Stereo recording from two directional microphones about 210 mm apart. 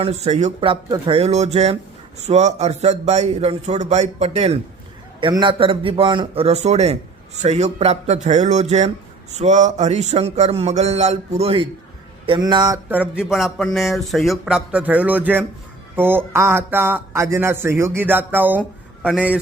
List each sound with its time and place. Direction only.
0.0 s a man's voice: 30° right (ahead or behind)
12.9 s speech: 5° right (ahead or behind)